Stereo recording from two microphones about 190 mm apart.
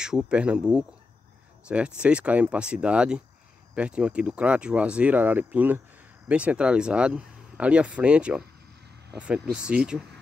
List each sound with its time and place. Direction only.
0.0 s speech: 5° right (ahead or behind)